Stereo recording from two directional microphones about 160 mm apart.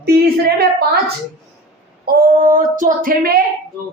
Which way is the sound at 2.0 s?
70° right (ahead or behind).